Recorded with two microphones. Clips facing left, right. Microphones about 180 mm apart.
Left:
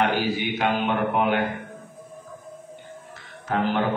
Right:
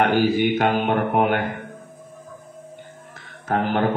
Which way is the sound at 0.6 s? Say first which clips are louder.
Right 3 dB; 50° right (ahead or behind).